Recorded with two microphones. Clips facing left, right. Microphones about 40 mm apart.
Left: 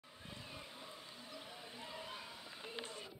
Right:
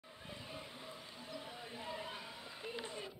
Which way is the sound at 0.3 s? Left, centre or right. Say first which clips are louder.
Right 3 dB; centre.